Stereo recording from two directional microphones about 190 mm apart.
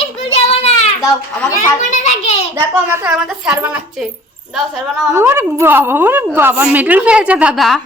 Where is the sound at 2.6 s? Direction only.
10° right (ahead or behind).